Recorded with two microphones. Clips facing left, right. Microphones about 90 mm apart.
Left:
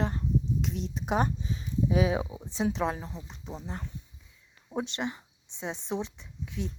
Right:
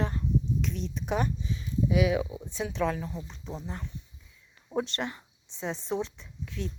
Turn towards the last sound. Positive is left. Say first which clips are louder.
# left 1 dB
turn(degrees=20)  # may be behind; listen again after turning